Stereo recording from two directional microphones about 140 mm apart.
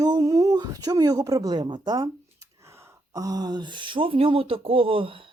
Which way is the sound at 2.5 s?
20° right (ahead or behind).